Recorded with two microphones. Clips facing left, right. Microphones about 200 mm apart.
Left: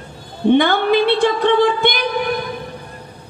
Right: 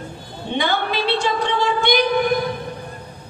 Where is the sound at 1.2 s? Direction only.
55° left (ahead or behind).